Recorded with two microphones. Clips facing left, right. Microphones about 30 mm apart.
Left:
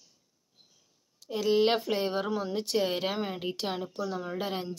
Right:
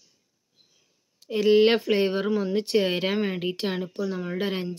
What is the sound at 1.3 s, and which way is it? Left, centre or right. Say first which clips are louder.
Speech: right 6 dB; right.